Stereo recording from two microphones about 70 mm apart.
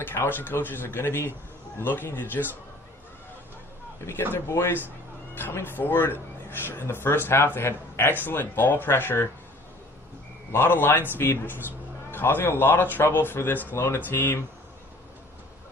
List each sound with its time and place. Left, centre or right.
0.0 s speech: left
4.0 s speech: left
10.5 s speech: left